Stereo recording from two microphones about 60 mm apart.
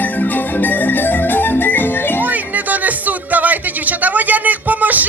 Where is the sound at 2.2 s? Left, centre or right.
Right.